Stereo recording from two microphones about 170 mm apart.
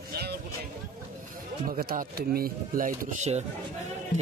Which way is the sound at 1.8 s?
65° right (ahead or behind).